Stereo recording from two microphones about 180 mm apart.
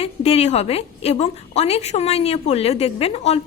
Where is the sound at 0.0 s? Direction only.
35° left (ahead or behind).